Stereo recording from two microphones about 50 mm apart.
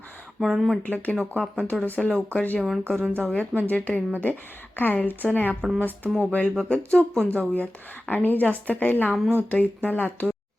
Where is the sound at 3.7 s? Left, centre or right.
Left.